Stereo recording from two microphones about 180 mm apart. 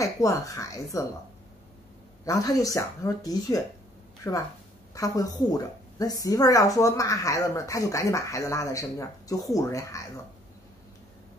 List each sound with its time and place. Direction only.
0.0 s a woman's voice: 20° left (ahead or behind)
2.2 s speech: 20° left (ahead or behind)
4.9 s a woman's voice: 20° left (ahead or behind)